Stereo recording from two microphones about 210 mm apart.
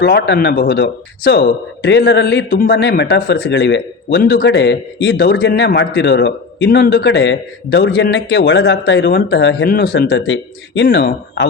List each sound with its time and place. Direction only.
0.0 s speech: 50° left (ahead or behind)